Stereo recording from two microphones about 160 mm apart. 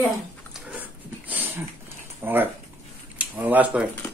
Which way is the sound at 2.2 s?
10° right (ahead or behind).